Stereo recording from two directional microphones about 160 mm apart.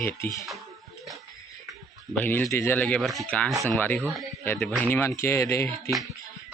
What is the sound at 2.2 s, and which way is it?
Speech, 10° left (ahead or behind).